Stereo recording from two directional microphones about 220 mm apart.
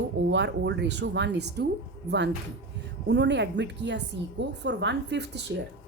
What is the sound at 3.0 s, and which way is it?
Speech, 50° right (ahead or behind).